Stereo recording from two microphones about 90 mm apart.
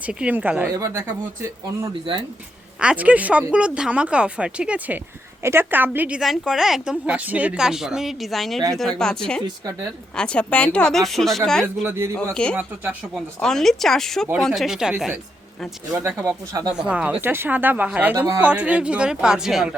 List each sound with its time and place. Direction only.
0.0 s speech: 15° right (ahead or behind)
0.7 s speech: 35° right (ahead or behind)
2.8 s speech: 15° right (ahead or behind)
5.4 s a woman's voice: 25° right (ahead or behind)
6.1 s speech: 5° right (ahead or behind)
6.9 s speech: 15° right (ahead or behind); by 11.6 s 5° left (ahead or behind)
11.9 s speech: 30° right (ahead or behind)
12.1 s speech: 10° left (ahead or behind)
12.5 s speech: 20° right (ahead or behind)
13.1 s speech: 5° left (ahead or behind)
16.2 s speech: 40° right (ahead or behind)
16.7 s speech: 15° right (ahead or behind)
17.2 s a woman's voice: 25° right (ahead or behind); by 19.7 s 5° right (ahead or behind)